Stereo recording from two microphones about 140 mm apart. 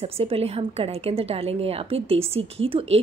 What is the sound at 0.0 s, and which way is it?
A woman's voice, 45° right (ahead or behind).